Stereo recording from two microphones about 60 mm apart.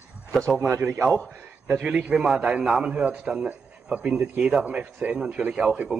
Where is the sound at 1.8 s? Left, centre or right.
Centre.